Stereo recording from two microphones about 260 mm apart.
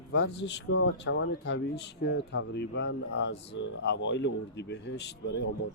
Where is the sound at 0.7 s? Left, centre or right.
Left.